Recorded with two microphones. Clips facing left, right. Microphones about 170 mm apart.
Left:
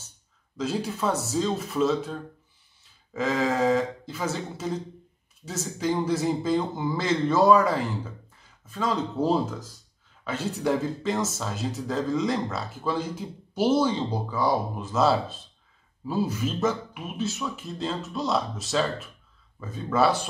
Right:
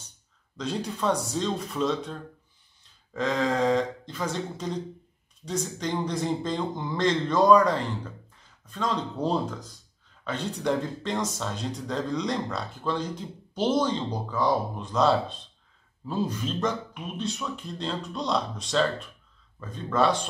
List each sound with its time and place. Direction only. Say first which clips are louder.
0.6 s speech: left 2 dB; 5° left (ahead or behind)